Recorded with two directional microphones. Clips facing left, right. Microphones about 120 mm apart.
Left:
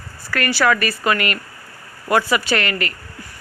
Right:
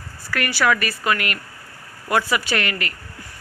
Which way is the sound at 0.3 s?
15° right (ahead or behind).